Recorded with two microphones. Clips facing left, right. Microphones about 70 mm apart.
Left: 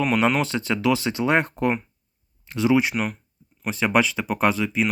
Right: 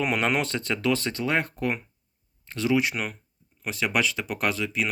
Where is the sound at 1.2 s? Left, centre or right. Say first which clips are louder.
Left 5 dB; left.